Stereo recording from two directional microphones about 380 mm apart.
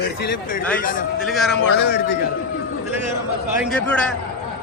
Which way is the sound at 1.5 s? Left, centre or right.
Left.